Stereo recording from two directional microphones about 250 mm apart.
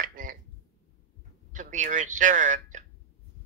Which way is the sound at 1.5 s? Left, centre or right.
Right.